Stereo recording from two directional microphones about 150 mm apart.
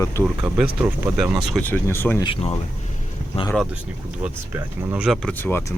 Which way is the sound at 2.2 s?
35° left (ahead or behind).